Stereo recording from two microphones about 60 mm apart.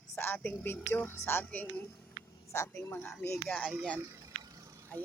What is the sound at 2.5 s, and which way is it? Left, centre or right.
Speech, left.